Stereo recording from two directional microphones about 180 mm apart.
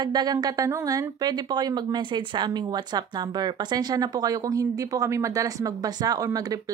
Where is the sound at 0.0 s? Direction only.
20° right (ahead or behind).